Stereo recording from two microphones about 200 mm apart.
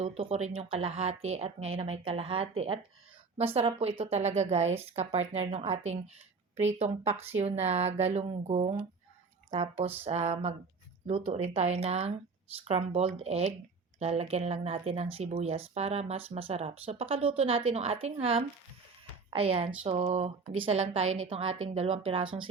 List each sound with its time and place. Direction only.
0.0 s speech: 30° right (ahead or behind)
21.0 s speech: 85° right
21.2 s speech: 30° right (ahead or behind)
22.2 s speech: 80° right